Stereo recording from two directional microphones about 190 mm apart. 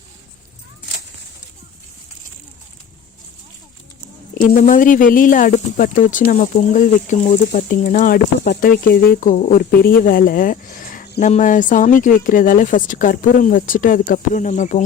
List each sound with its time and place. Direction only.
4.4 s a woman's voice: 45° left (ahead or behind)
8.2 s a woman's voice: 55° left (ahead or behind); by 14.8 s 40° left (ahead or behind)